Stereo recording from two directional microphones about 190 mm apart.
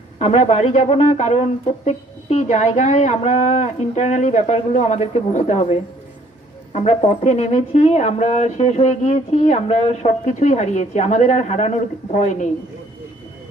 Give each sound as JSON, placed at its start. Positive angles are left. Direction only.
{"t": 0.2, "sound": "speech", "side_deg": 35}